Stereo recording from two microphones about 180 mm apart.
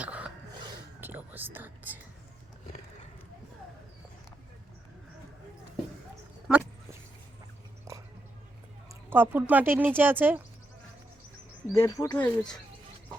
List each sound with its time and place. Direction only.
0.0 s a sound: 5° right (ahead or behind)
1.0 s whispering: 10° right (ahead or behind)
7.9 s chewing: 15° right (ahead or behind)
9.0 s speech: 10° right (ahead or behind)
11.6 s speech: 15° left (ahead or behind)
12.2 s speech: 5° left (ahead or behind)